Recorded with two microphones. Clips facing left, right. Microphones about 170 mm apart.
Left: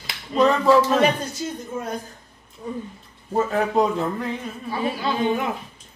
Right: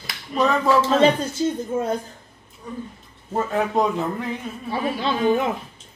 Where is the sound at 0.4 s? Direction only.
Centre (ahead or behind).